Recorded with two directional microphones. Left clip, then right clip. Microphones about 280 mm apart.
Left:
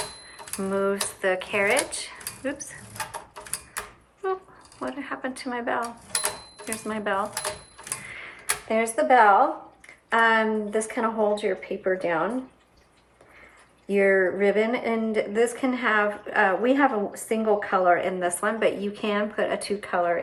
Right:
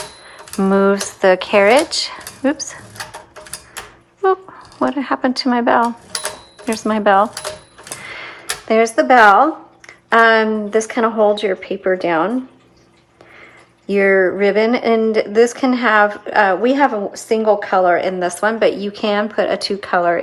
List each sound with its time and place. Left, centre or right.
0.6 s speech: right
4.8 s speech: right
6.8 s speech: right
8.0 s tick-tock: right
8.7 s speech: right
13.8 s speech: centre